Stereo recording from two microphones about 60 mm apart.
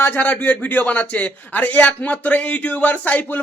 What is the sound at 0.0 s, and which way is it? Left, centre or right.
A man's voice, left.